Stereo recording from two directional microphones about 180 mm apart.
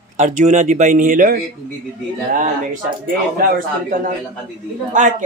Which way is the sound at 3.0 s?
50° right (ahead or behind).